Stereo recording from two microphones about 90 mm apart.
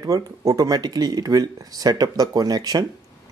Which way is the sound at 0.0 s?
40° right (ahead or behind).